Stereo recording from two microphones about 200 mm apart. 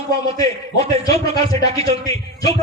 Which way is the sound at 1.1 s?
30° right (ahead or behind).